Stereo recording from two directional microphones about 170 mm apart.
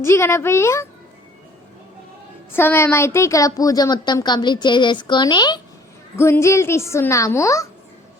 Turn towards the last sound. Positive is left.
turn(degrees=20)  # may be behind; listen again after turning